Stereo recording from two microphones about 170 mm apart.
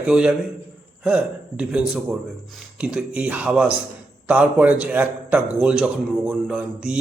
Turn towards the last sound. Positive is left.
turn(degrees=-5)  # may be behind; listen again after turning